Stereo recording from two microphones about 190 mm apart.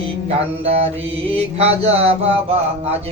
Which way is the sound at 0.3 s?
30° right (ahead or behind).